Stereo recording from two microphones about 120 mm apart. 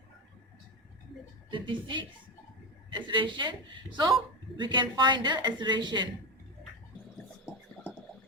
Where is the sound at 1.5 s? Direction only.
45° right (ahead or behind).